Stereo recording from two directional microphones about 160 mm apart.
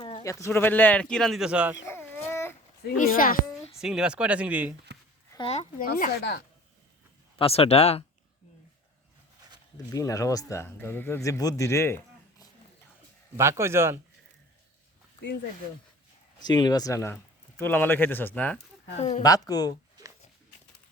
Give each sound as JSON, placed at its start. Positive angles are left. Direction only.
{"t": 0.0, "sound": "speech", "side_deg": 25}
{"t": 1.9, "sound": "a sound", "side_deg": 15}
{"t": 2.8, "sound": "speech", "side_deg": 65}
{"t": 3.8, "sound": "speech", "side_deg": -5}
{"t": 4.9, "sound": "a sound", "side_deg": -90}
{"t": 5.4, "sound": "a sound", "side_deg": 40}
{"t": 5.8, "sound": "speech", "side_deg": 75}
{"t": 7.3, "sound": "speech", "side_deg": 40}
{"t": 9.7, "sound": "speech", "side_deg": 20}
{"t": 13.3, "sound": "speech", "side_deg": -15}
{"t": 16.4, "sound": "speech", "side_deg": 25}
{"t": 18.9, "sound": "speech", "side_deg": 45}
{"t": 19.2, "sound": "speech", "side_deg": 25}